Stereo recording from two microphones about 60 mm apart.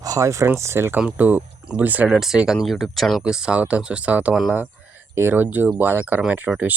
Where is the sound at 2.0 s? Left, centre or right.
Centre.